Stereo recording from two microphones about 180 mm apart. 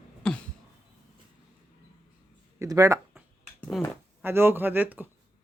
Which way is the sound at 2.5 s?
15° right (ahead or behind).